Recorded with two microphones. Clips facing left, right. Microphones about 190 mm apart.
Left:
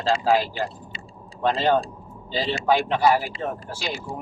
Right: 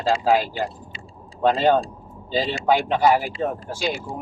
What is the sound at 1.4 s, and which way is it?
Speech, 15° right (ahead or behind).